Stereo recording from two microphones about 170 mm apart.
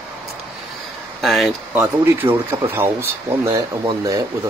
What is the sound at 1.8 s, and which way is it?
Speech, 15° right (ahead or behind).